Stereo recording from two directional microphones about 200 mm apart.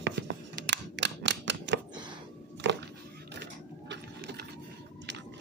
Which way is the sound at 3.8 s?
55° right (ahead or behind).